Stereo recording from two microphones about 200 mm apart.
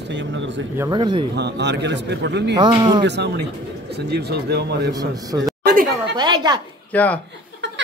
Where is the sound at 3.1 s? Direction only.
60° right (ahead or behind).